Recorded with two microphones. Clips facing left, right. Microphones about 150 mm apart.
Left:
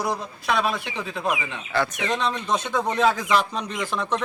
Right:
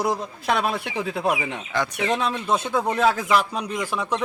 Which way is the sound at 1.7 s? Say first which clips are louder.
Even; 15° right (ahead or behind).